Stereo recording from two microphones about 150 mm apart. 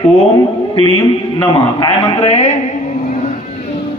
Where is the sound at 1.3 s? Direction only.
40° left (ahead or behind).